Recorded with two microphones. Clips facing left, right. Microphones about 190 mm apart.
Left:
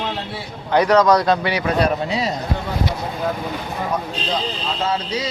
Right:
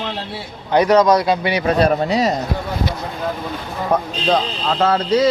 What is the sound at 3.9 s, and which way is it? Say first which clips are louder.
Speech: right 9 dB; 55° right (ahead or behind).